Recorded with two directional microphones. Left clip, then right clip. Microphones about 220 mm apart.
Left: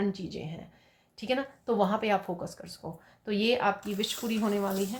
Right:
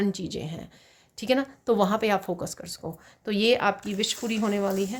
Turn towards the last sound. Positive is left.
turn(degrees=-50)  # may be behind; listen again after turning